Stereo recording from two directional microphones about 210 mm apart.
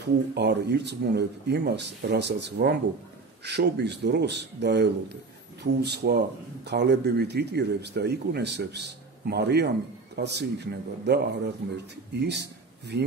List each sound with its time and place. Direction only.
0.3 s a man's voice: 50° right (ahead or behind)